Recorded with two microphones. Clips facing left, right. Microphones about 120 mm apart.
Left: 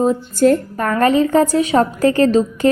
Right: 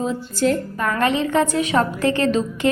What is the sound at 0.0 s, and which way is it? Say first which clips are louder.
A woman's voice: left 7 dB; 45° left (ahead or behind).